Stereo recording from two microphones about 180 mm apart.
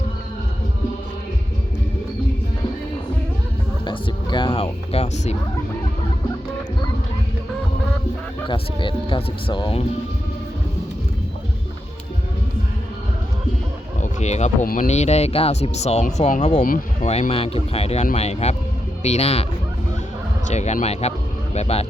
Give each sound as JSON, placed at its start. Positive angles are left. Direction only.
{"t": 3.8, "sound": "music", "side_deg": 25}
{"t": 8.4, "sound": "speech", "side_deg": 25}
{"t": 14.0, "sound": "speech", "side_deg": 40}
{"t": 20.5, "sound": "speech", "side_deg": 40}